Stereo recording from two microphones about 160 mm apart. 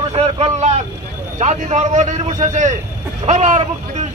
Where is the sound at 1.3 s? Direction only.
45° right (ahead or behind).